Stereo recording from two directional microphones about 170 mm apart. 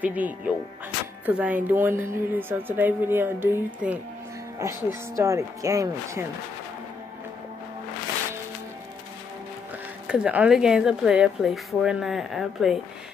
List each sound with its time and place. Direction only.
0.0 s a woman's voice: 10° right (ahead or behind)
10.0 s speech: 5° right (ahead or behind)